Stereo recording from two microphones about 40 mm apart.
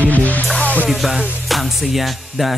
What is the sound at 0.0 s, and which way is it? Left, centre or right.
Music, left.